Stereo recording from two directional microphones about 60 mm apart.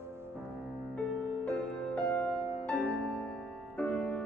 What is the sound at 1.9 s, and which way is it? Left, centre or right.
Music, left.